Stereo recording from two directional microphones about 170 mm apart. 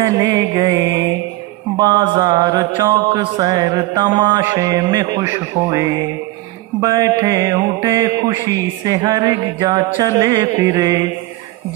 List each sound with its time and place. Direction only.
0.0 s mantra: 20° right (ahead or behind)